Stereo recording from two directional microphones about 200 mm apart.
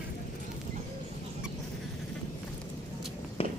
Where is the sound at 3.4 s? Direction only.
30° left (ahead or behind).